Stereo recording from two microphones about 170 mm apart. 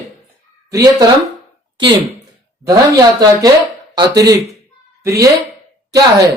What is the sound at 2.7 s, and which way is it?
Speech, 20° right (ahead or behind).